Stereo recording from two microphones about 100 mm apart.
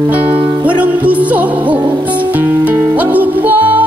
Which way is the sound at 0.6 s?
15° right (ahead or behind).